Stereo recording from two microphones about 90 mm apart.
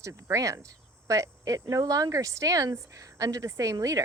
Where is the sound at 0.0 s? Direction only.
35° right (ahead or behind).